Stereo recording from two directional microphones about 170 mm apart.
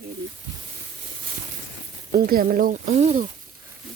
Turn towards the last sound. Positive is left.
turn(degrees=-40)  # may be behind; listen again after turning